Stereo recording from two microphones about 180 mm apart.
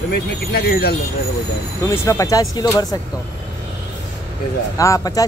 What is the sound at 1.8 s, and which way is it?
Speech, 15° left (ahead or behind).